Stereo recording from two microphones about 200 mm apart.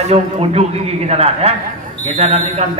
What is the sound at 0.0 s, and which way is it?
Speech, 30° right (ahead or behind).